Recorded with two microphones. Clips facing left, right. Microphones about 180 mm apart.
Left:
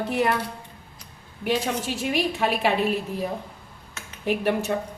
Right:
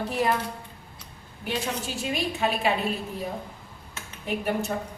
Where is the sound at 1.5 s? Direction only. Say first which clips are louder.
Left 5 dB; 65° left (ahead or behind).